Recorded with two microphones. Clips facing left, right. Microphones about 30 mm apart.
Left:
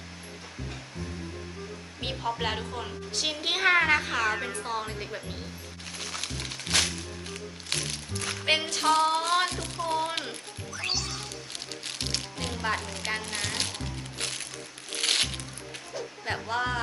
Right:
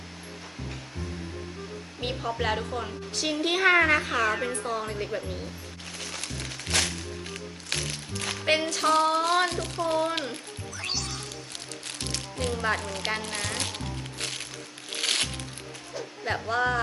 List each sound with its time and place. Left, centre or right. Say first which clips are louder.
2.0 s a woman's voice: right 1 dB; centre
4.6 s a woman's voice: right 2 dB; centre
4.9 s a woman's voice: right 5 dB; centre
6.0 s music: left 1 dB; centre
8.4 s a woman's voice: right 1 dB; centre
10.8 s music: left 1 dB; centre
11.9 s music: left 1 dB; left
12.4 s a woman's voice: right 4 dB; centre
13.7 s music: right 2 dB; centre
16.0 s speech: right 2 dB; centre